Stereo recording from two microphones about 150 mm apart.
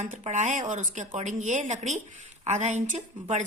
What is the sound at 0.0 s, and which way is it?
A woman's voice, 55° right (ahead or behind).